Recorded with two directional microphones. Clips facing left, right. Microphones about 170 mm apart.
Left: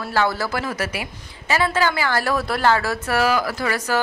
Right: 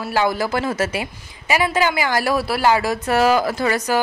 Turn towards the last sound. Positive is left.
turn(degrees=-20)  # may be behind; listen again after turning